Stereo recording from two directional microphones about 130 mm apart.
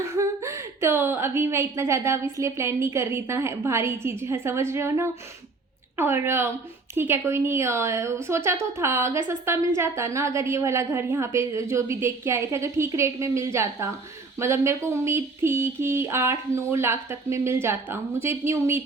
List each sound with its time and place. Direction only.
0.2 s a woman's voice: 20° right (ahead or behind)